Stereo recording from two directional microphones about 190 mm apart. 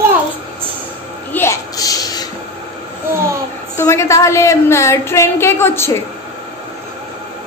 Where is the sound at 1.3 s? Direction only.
15° left (ahead or behind).